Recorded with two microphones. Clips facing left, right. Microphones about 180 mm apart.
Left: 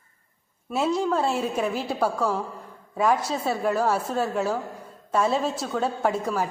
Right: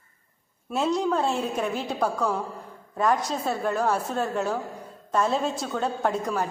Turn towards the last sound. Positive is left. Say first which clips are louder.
# left 1 dB
turn(degrees=5)  # may be behind; listen again after turning